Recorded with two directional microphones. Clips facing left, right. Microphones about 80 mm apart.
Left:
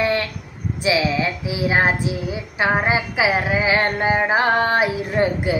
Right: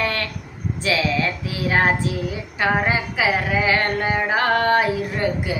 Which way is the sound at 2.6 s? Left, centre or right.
Centre.